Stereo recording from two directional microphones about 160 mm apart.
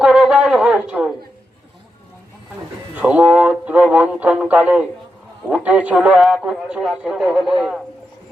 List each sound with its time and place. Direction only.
0.0 s wind instrument: 5° right (ahead or behind)
2.9 s radio: 10° right (ahead or behind)
5.5 s a man's voice: 10° right (ahead or behind)